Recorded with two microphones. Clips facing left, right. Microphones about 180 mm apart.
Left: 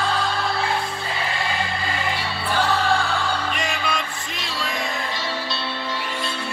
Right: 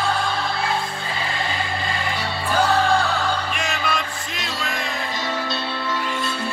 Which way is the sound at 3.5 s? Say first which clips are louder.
Right 1 dB; 5° right (ahead or behind).